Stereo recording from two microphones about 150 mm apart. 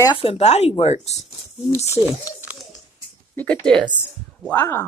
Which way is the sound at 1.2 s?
15° right (ahead or behind).